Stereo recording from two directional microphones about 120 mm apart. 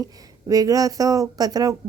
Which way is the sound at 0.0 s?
30° right (ahead or behind).